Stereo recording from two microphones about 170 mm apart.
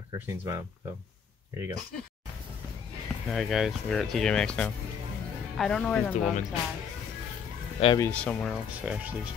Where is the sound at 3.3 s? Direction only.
Centre (ahead or behind).